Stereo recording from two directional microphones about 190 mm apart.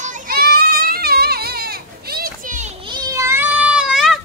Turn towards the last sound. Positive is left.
turn(degrees=0)  # may be behind; listen again after turning